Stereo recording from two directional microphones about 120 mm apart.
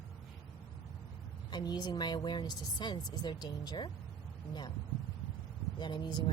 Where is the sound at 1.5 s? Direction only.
35° left (ahead or behind).